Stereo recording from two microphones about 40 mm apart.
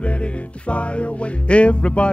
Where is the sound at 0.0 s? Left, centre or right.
Left.